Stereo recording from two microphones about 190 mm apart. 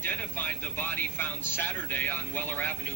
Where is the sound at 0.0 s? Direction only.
10° left (ahead or behind).